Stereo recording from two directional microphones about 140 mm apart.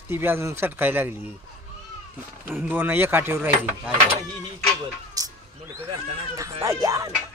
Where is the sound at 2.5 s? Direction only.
10° right (ahead or behind).